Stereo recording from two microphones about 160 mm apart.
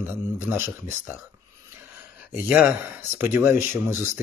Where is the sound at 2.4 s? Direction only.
10° right (ahead or behind).